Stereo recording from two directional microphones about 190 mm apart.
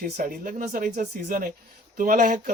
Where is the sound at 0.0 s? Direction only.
45° right (ahead or behind).